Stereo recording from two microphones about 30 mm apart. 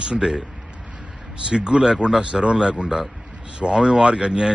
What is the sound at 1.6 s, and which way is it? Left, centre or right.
Speech, right.